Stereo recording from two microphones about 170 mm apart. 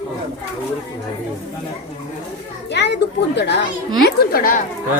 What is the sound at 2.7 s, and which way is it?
Speech, 90° left.